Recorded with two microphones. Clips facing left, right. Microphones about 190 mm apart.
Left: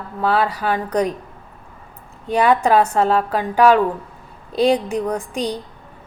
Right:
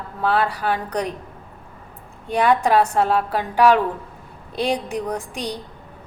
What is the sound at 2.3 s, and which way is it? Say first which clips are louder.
A woman's voice: left 2 dB; centre (ahead or behind).